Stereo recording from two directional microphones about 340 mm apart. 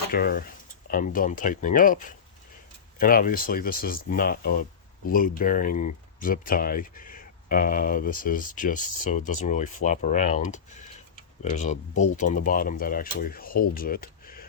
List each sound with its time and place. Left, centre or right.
0.1 s speech: left